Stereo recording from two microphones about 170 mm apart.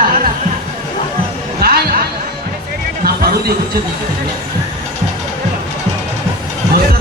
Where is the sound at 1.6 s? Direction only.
65° right (ahead or behind).